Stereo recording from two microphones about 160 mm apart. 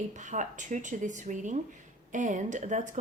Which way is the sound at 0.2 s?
50° right (ahead or behind).